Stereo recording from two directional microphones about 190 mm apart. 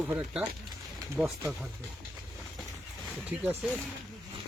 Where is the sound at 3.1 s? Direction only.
Centre (ahead or behind).